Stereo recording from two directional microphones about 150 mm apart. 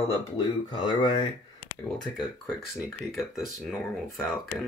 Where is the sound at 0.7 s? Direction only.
30° left (ahead or behind).